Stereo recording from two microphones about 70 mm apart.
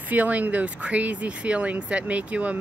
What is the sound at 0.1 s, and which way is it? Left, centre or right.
Speech, right.